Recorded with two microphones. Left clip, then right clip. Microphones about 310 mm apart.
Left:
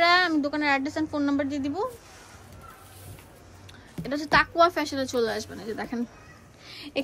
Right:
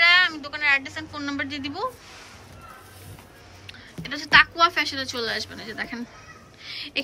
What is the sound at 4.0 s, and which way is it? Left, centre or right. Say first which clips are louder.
A woman's voice: right 5 dB; centre.